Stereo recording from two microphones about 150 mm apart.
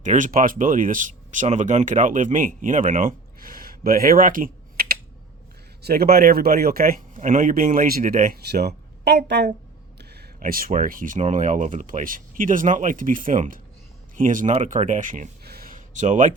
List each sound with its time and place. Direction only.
0.0 s speech: 55° right (ahead or behind); by 4.9 s 75° right (ahead or behind)
5.8 s speech: 85° right
7.2 s speech: 60° right (ahead or behind)